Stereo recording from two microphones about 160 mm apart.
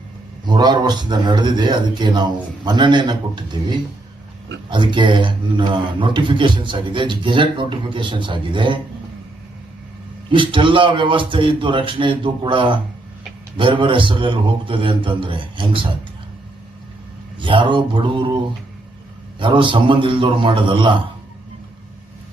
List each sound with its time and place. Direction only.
0.4 s a man's voice: 25° right (ahead or behind)
10.3 s a man's voice: 30° right (ahead or behind)
17.4 s a man's voice: 30° right (ahead or behind)
19.4 s a man's voice: 30° right (ahead or behind)